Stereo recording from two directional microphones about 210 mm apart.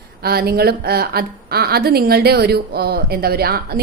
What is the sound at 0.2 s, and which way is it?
A woman's voice, 45° right (ahead or behind).